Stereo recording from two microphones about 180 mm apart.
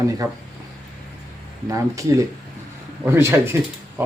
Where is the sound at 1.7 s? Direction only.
15° right (ahead or behind).